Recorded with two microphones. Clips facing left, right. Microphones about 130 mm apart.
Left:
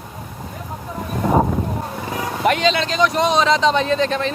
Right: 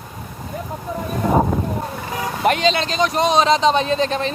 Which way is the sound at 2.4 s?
30° right (ahead or behind).